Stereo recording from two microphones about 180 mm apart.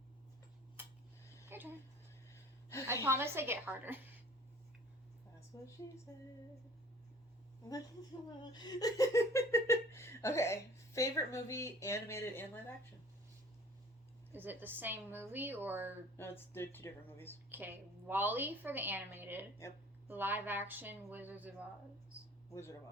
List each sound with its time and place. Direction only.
1.5 s a sound: 10° right (ahead or behind)
2.8 s a woman's voice: 15° right (ahead or behind)
5.5 s a woman's voice: 20° left (ahead or behind)
8.4 s speech: 25° left (ahead or behind)
14.3 s a woman's voice: 10° right (ahead or behind)
16.1 s speech: 10° left (ahead or behind)
17.5 s a woman's voice: 10° right (ahead or behind)